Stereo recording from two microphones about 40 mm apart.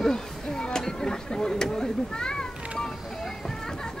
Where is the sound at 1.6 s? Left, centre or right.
Centre.